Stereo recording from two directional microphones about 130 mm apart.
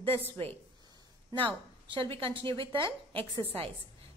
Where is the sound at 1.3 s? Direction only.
40° right (ahead or behind).